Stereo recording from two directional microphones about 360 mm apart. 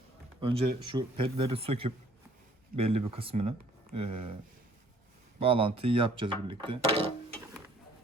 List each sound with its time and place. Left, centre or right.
0.3 s speech: centre
5.4 s speech: centre